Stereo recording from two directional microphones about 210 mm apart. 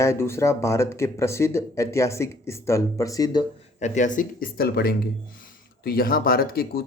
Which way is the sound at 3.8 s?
35° left (ahead or behind).